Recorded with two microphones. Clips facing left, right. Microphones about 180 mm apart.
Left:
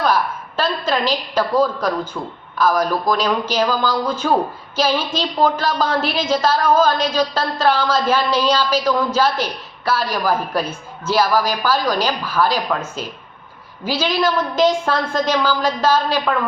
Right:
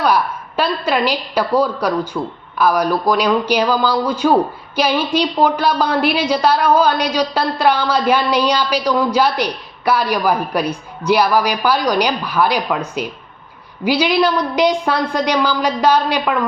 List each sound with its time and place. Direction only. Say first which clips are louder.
0.0 s a woman's voice: right 2 dB; 15° right (ahead or behind)